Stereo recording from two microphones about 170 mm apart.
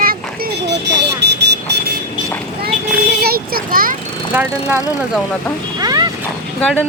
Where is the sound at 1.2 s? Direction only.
85° right.